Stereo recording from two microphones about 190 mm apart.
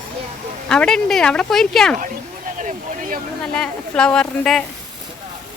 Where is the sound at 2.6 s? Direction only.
40° right (ahead or behind).